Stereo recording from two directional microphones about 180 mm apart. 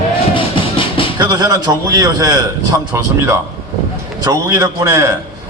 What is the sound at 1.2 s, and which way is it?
A man's voice, 20° right (ahead or behind).